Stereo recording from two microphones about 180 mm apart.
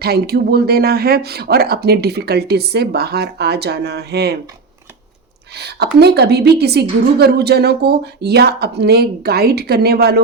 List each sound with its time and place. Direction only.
0.0 s speech: 60° right (ahead or behind)
5.5 s speech: 65° right (ahead or behind)